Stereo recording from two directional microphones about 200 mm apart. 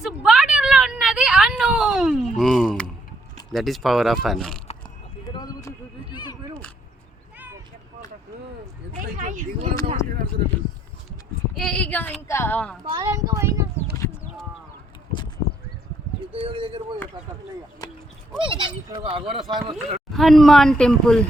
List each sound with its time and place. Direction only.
0.0 s a sound: 5° right (ahead or behind)
3.5 s speech: centre (ahead or behind)
5.3 s a sound: 20° left (ahead or behind)
7.3 s vehicle: 10° right (ahead or behind)
9.0 s speech: 40° right (ahead or behind)
9.8 s a sound: 40° right (ahead or behind)
11.5 s speech: 5° left (ahead or behind)
12.8 s speech: 20° right (ahead or behind)
13.9 s clip-clop: 15° left (ahead or behind)
16.3 s speech: 25° right (ahead or behind)
17.8 s a sound: 20° left (ahead or behind)
18.3 s speech: 25° right (ahead or behind)
20.1 s speech: centre (ahead or behind)